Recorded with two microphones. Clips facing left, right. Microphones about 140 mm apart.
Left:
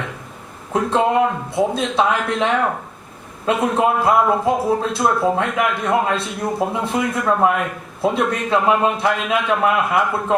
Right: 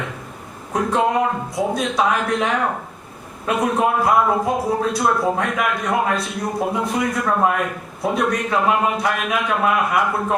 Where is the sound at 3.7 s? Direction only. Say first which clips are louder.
Left 1 dB; 25° left (ahead or behind).